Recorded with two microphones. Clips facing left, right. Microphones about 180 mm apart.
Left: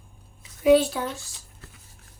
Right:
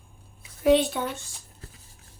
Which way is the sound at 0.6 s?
Centre (ahead or behind).